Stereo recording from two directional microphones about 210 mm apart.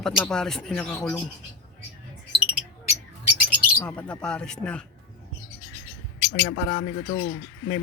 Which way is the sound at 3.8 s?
5° left (ahead or behind).